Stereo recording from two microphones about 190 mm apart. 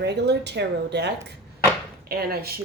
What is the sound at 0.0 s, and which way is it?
Speech, 65° right (ahead or behind).